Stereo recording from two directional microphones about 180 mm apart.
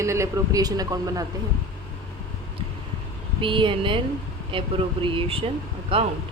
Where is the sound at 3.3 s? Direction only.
30° right (ahead or behind).